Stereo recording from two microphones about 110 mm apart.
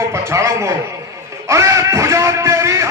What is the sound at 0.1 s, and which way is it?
Speech, 25° right (ahead or behind).